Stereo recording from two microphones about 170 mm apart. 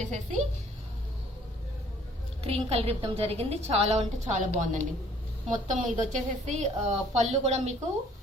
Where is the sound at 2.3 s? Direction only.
35° right (ahead or behind).